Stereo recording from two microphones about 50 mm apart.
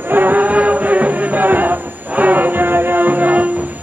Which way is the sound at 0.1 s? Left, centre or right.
Right.